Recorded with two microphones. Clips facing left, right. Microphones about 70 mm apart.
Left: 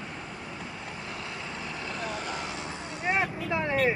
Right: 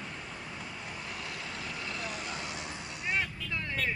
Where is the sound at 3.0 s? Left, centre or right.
Left.